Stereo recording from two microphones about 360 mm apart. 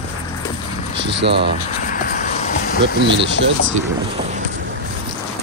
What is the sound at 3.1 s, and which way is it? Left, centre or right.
Speech, right.